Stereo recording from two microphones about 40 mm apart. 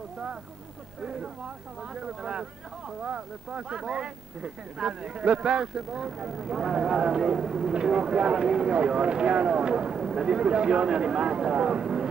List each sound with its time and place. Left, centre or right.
2.0 s speech: right
9.9 s speech: centre
10.2 s speech: right